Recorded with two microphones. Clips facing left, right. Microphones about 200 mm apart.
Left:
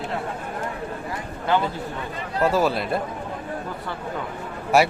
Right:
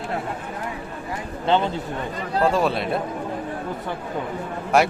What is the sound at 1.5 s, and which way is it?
Speech, 25° right (ahead or behind).